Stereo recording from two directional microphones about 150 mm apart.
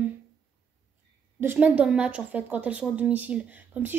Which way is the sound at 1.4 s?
10° right (ahead or behind).